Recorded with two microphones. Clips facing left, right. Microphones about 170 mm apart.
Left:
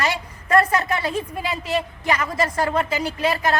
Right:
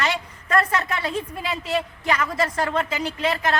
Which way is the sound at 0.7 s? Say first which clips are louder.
Left 3 dB; 35° left (ahead or behind).